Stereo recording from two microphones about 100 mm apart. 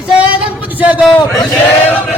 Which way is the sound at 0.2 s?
15° right (ahead or behind).